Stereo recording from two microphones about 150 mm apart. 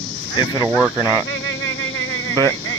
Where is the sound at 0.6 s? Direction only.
10° right (ahead or behind).